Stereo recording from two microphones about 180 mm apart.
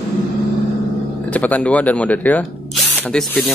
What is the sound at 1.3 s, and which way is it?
Speech, 10° left (ahead or behind).